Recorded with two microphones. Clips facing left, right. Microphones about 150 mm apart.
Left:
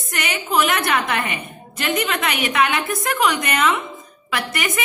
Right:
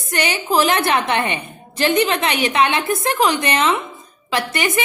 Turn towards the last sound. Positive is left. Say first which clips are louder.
# right 4 dB
turn(degrees=-30)  # may be behind; listen again after turning